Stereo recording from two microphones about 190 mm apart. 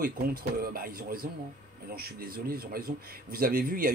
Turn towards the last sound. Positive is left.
turn(degrees=-50)  # may be behind; listen again after turning